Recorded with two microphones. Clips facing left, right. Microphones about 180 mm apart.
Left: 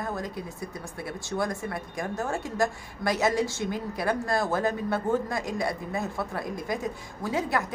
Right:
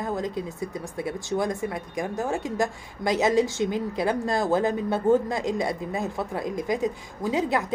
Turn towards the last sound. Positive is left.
turn(degrees=-20)  # may be behind; listen again after turning